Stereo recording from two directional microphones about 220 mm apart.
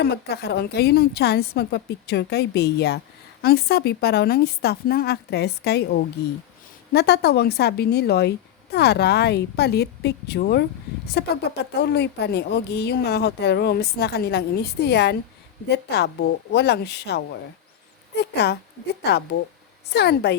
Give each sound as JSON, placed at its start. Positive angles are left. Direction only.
{"t": 0.0, "sound": "a woman's voice", "side_deg": 50}